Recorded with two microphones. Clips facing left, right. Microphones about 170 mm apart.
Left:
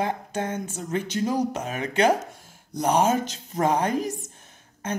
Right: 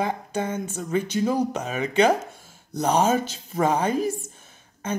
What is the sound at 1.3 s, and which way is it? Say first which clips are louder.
Speech: right 1 dB; 10° left (ahead or behind).